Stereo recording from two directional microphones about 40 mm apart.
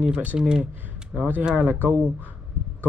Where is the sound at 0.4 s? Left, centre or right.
Right.